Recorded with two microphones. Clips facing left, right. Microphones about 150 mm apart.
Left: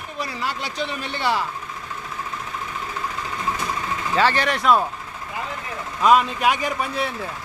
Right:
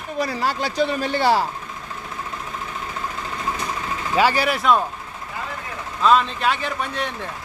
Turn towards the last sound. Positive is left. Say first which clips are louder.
# left 1 dB
turn(degrees=5)  # may be behind; listen again after turning